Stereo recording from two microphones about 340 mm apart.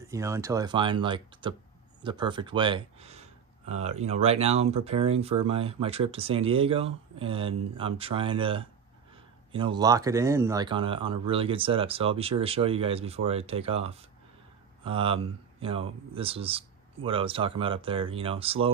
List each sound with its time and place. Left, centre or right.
0.0 s speech: centre